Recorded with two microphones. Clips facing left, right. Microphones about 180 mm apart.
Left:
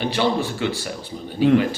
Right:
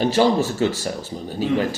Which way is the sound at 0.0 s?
40° right (ahead or behind).